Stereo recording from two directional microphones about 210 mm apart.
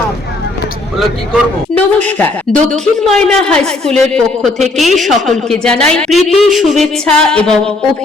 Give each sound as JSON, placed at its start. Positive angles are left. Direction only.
{"t": 0.9, "sound": "a man's voice", "side_deg": 5}